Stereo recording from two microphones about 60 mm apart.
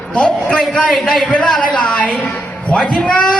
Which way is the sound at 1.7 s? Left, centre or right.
Centre.